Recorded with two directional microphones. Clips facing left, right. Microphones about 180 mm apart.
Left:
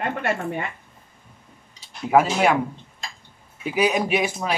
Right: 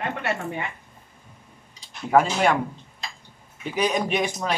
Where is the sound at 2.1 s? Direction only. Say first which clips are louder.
Left 1 dB; 5° left (ahead or behind).